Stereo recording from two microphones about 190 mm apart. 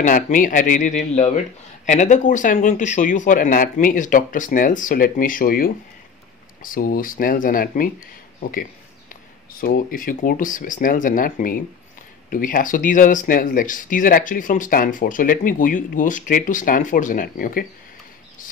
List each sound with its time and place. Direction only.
0.0 s speech: 45° left (ahead or behind)